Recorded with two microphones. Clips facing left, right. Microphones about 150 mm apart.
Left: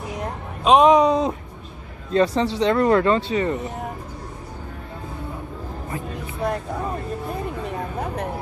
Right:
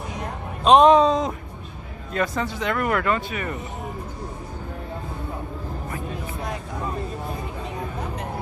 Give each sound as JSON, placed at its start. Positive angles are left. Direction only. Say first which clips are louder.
{"t": 0.7, "sound": "speech", "louder": "even", "side_deg": 10}
{"t": 2.1, "sound": "speech", "louder": "left 6 dB", "side_deg": 30}